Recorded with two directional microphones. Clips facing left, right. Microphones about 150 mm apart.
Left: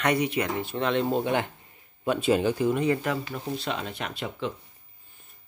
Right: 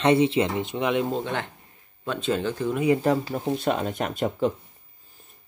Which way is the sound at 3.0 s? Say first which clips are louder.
Right 6 dB; 35° right (ahead or behind).